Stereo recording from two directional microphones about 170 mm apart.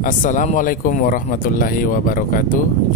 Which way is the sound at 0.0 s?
50° left (ahead or behind).